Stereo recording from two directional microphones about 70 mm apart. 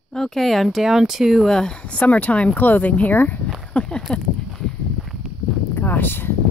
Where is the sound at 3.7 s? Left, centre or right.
Centre.